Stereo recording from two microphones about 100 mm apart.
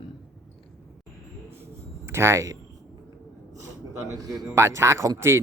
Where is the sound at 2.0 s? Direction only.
25° right (ahead or behind).